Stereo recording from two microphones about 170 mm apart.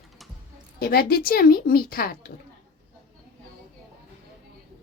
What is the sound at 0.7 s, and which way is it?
A woman's voice, 65° left (ahead or behind).